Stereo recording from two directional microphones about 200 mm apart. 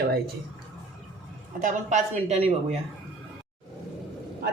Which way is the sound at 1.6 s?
35° right (ahead or behind).